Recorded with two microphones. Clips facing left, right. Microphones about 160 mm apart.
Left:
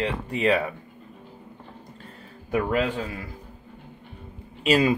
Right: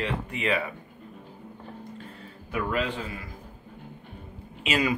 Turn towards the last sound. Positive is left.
turn(degrees=35)  # may be behind; listen again after turning